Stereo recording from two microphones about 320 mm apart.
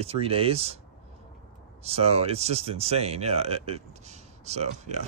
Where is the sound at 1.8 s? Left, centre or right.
Centre.